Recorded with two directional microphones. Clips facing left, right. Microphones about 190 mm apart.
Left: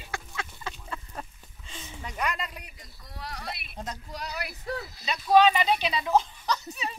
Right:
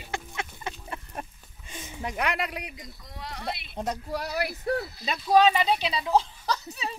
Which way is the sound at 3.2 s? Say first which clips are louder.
Right 3 dB; 25° right (ahead or behind).